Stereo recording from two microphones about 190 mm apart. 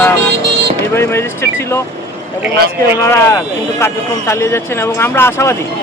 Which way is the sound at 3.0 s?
15° left (ahead or behind).